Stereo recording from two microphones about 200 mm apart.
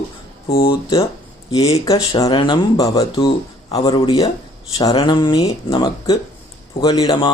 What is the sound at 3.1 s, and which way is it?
Speech, 30° left (ahead or behind).